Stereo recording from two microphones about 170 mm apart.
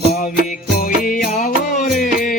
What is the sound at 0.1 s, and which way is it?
Music, 55° left (ahead or behind).